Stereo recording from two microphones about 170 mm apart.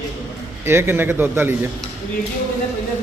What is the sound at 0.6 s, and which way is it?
Speech, 15° right (ahead or behind).